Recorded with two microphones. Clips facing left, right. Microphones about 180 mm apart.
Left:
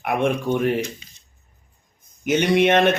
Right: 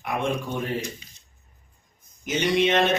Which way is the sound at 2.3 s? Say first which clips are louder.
Left 5 dB; 60° left (ahead or behind).